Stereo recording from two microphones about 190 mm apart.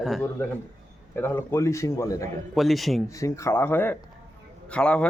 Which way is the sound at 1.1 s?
10° left (ahead or behind).